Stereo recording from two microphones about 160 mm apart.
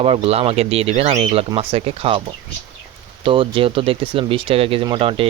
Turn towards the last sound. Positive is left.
turn(degrees=-35)  # may be behind; listen again after turning